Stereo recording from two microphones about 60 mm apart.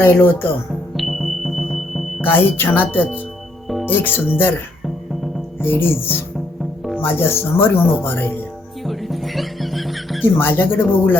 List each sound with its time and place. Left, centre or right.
0.0 s speech: left
0.9 s music: centre
2.2 s speech: left
5.6 s speech: left
8.8 s music: centre
10.3 s speech: left